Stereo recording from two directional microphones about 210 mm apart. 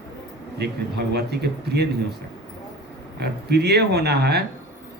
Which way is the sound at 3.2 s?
50° right (ahead or behind).